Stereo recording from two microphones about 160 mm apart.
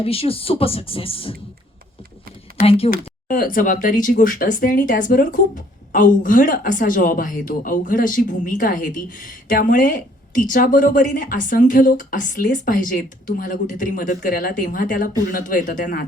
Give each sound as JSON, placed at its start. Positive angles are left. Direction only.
{"t": 0.0, "sound": "speech", "side_deg": 35}
{"t": 2.6, "sound": "speech", "side_deg": 40}
{"t": 2.9, "sound": "speech", "side_deg": 60}